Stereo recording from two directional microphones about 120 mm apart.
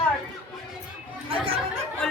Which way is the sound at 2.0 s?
5° left (ahead or behind).